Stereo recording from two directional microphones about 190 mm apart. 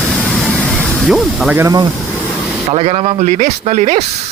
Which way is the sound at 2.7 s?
35° right (ahead or behind).